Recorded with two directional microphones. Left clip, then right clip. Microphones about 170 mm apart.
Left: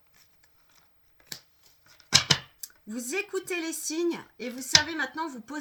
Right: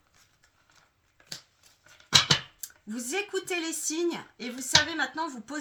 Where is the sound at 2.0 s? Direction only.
40° left (ahead or behind).